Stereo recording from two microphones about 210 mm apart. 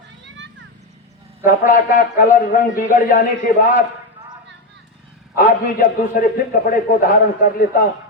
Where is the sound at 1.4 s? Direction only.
40° left (ahead or behind).